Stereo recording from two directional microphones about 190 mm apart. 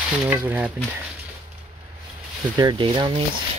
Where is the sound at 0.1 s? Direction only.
15° right (ahead or behind).